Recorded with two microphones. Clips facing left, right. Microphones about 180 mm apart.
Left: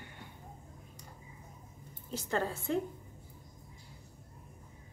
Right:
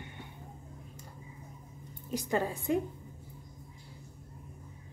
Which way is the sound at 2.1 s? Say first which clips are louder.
Right 3 dB; 15° right (ahead or behind).